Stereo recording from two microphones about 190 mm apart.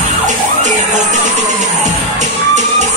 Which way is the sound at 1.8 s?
40° right (ahead or behind).